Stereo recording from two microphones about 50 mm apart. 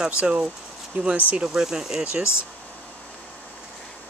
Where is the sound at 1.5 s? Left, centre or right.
Centre.